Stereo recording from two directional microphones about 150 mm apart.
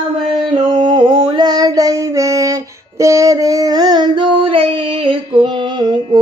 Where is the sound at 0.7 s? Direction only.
30° right (ahead or behind).